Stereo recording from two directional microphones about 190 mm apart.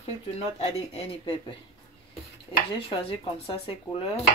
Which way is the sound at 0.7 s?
35° left (ahead or behind).